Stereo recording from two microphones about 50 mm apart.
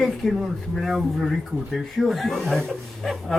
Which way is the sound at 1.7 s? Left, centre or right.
Centre.